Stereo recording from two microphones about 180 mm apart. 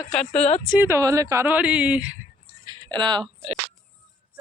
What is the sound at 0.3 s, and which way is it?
Speech, 35° left (ahead or behind).